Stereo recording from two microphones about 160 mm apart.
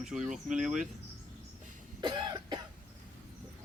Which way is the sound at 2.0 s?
25° right (ahead or behind).